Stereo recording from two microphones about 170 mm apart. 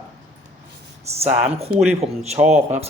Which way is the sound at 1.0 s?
40° right (ahead or behind).